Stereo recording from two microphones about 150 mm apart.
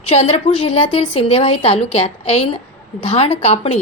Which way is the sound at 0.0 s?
45° left (ahead or behind).